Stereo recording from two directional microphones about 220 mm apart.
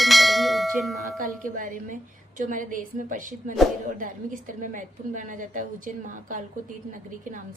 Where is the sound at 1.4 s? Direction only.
35° right (ahead or behind).